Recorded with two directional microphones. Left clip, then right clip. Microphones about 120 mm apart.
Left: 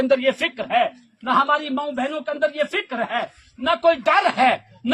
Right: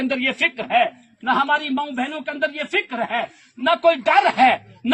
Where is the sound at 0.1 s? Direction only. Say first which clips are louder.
Left 2 dB; 40° left (ahead or behind).